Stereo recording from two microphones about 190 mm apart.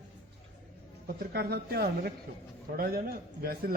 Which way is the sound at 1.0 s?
55° right (ahead or behind).